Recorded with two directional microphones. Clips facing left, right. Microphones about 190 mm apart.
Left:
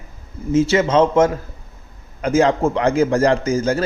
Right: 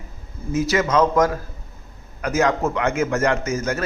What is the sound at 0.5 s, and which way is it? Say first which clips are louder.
A man's voice: left 4 dB; 25° left (ahead or behind).